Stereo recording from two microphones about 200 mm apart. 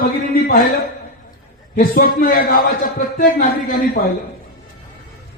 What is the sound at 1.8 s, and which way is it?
A man's voice, 45° left (ahead or behind).